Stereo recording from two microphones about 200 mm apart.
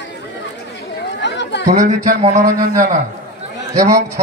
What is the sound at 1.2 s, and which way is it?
Chatter, 60° left (ahead or behind).